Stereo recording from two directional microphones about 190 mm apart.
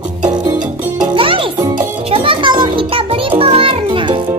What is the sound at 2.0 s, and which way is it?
Music, 30° right (ahead or behind).